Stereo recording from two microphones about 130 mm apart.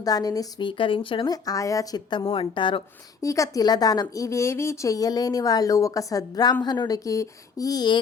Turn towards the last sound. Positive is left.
turn(degrees=30)  # may be behind; listen again after turning